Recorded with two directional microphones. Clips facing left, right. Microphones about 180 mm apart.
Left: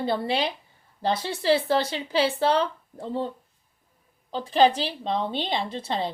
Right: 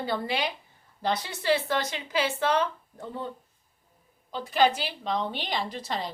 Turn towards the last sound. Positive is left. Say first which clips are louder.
# left 4 dB
turn(degrees=25)  # may be behind; listen again after turning